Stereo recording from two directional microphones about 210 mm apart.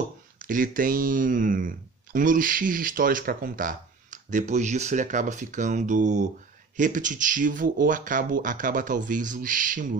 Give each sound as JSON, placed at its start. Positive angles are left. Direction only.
{"t": 0.4, "sound": "speech", "side_deg": -40}